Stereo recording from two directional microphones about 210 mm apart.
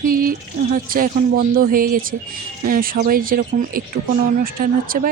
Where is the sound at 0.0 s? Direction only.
45° right (ahead or behind).